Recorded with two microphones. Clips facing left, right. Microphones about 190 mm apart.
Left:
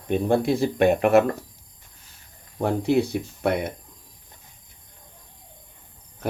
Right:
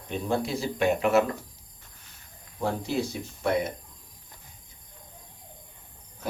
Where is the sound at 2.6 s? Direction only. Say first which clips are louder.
Left 7 dB; 65° left (ahead or behind).